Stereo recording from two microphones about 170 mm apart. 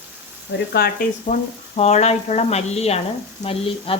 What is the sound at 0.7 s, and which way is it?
Speech, 65° left (ahead or behind).